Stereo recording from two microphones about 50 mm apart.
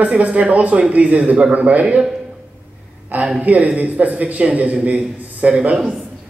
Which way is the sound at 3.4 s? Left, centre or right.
Right.